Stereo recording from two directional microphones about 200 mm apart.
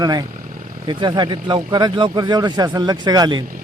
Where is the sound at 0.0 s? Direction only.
20° right (ahead or behind).